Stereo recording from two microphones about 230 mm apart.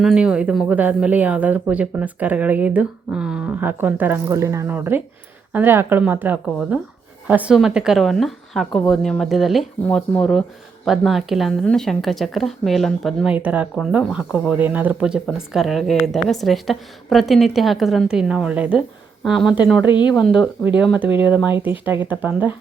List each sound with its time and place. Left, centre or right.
0.0 s speech: centre
19.8 s speech: centre
20.4 s speech: centre